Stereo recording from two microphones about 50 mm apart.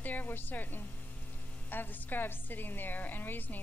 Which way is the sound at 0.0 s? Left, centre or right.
Left.